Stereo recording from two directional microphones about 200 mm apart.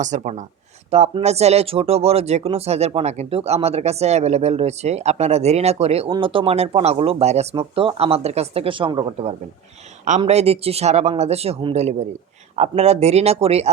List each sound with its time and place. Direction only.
0.0 s speech: 35° right (ahead or behind)